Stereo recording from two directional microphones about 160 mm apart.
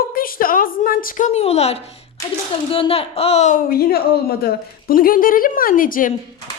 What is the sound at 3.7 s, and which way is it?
A woman's voice, 70° left (ahead or behind).